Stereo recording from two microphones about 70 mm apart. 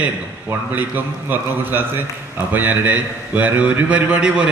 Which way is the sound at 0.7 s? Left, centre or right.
Right.